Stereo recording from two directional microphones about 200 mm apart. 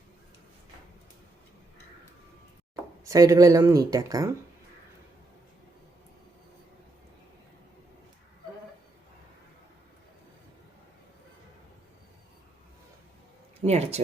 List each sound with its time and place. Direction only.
3.0 s speech: 15° right (ahead or behind)
13.7 s speech: 35° right (ahead or behind)